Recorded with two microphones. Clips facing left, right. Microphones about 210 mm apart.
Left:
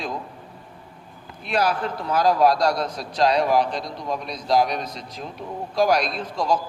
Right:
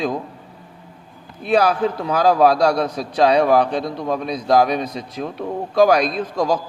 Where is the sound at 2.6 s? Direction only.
60° right (ahead or behind).